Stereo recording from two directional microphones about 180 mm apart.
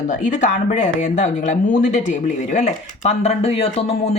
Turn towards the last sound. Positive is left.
turn(degrees=35)  # may be behind; listen again after turning